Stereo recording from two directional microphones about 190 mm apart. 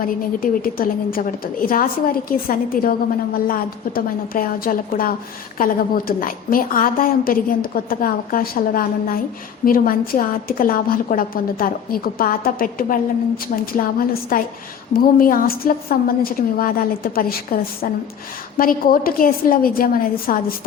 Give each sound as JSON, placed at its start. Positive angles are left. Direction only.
{"t": 0.0, "sound": "a woman's voice", "side_deg": 50}